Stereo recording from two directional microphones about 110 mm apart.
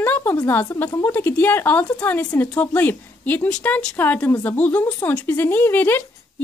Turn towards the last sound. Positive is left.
turn(degrees=20)  # may be behind; listen again after turning